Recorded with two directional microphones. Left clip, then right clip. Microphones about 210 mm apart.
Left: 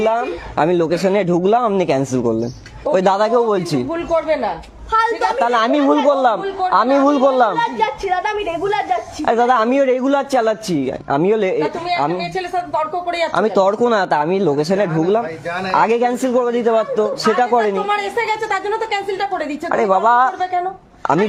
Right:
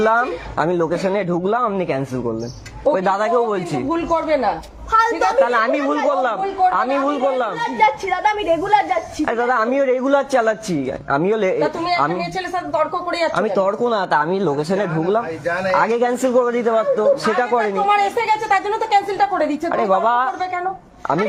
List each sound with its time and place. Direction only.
0.0 s speech: 15° left (ahead or behind)
0.5 s speech: 35° left (ahead or behind)
4.1 s a woman's voice: 15° left (ahead or behind)
5.5 s speech: 50° left (ahead or behind)
7.8 s speech: 15° left (ahead or behind)
9.2 s speech: 55° left (ahead or behind); by 11.6 s 30° left (ahead or behind)
11.6 s speech: 10° left (ahead or behind)
12.7 s a woman's voice: 20° left (ahead or behind)
13.3 s speech: 50° left (ahead or behind)
17.8 s a woman's voice: 20° left (ahead or behind)
19.7 s speech: 45° left (ahead or behind)